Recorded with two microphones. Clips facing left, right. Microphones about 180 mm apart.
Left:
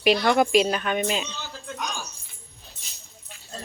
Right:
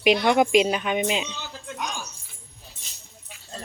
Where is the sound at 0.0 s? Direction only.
15° right (ahead or behind).